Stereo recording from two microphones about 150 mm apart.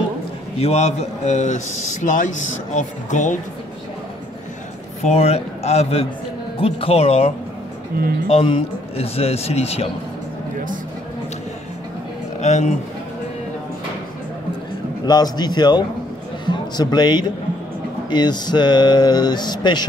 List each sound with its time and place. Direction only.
0.6 s a man's voice: 45° left (ahead or behind)
5.0 s a man's voice: 45° left (ahead or behind)
7.9 s speech: 75° right (ahead or behind)
8.3 s a man's voice: 35° left (ahead or behind)
12.4 s a man's voice: 50° left (ahead or behind)
15.0 s a man's voice: 25° left (ahead or behind)